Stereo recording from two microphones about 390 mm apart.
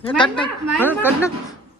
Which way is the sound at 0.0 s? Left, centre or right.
Centre.